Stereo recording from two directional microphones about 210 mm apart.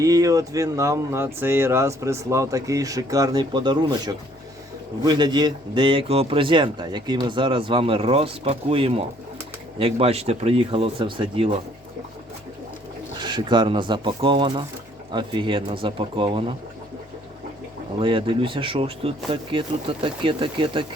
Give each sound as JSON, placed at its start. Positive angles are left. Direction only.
{"t": 0.0, "sound": "a man's voice", "side_deg": -15}
{"t": 13.1, "sound": "a man's voice", "side_deg": -20}
{"t": 18.0, "sound": "a man's voice", "side_deg": -25}